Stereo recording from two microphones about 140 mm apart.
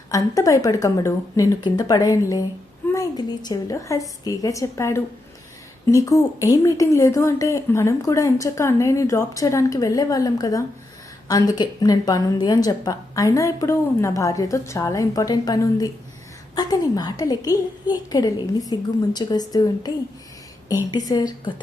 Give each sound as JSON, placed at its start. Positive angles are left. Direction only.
{"t": 0.1, "sound": "speech", "side_deg": 25}